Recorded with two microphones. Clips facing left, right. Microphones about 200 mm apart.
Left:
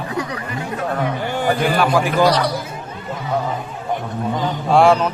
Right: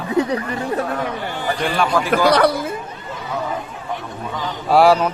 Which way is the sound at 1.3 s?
50° left (ahead or behind).